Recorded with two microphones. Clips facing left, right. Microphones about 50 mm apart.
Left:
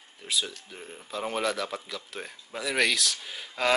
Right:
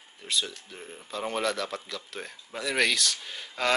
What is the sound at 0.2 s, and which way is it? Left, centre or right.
Speech, centre.